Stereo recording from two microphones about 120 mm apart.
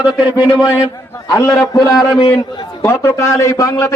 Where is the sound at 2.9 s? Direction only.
20° left (ahead or behind).